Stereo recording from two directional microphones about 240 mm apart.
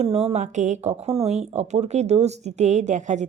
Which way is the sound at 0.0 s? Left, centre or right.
Right.